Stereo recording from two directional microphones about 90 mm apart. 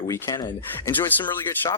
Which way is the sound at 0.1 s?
40° left (ahead or behind).